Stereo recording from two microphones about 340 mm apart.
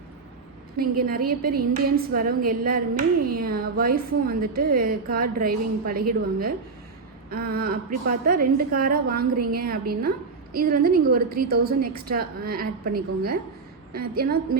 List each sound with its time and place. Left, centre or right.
0.8 s a woman's voice: right